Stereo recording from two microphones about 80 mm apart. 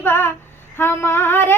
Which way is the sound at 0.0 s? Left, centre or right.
Left.